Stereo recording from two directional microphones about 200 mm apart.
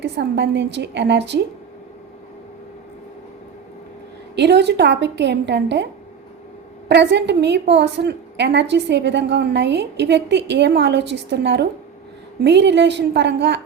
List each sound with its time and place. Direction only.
0.0 s a woman's voice: 60° right (ahead or behind)
4.4 s a woman's voice: 55° right (ahead or behind)